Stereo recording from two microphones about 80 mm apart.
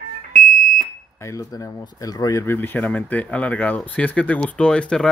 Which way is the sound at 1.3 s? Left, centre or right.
Left.